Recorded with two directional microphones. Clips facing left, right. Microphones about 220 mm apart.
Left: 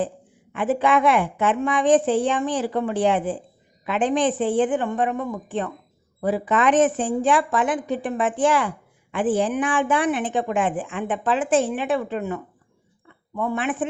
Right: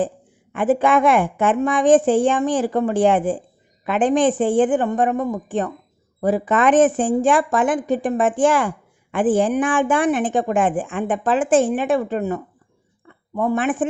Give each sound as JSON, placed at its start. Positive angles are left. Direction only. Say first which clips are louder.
{"t": 0.5, "sound": "a woman's voice", "louder": "right 3 dB", "side_deg": -50}